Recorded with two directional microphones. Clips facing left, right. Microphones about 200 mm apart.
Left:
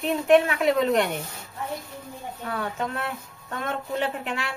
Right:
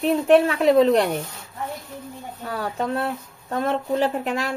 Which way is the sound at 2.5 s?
35° right (ahead or behind).